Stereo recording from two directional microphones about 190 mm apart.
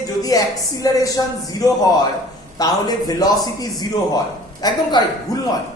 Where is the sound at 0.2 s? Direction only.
20° left (ahead or behind).